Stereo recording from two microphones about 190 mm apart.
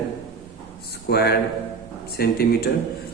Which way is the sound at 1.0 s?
55° left (ahead or behind).